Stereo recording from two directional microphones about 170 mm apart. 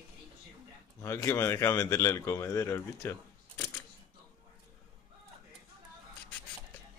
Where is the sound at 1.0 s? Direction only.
20° left (ahead or behind).